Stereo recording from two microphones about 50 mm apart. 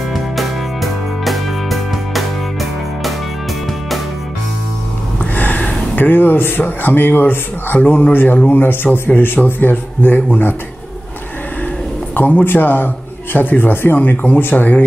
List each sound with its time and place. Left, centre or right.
0.1 s music: centre
5.3 s a sound: left
5.9 s a man's voice: left
12.1 s a man's voice: left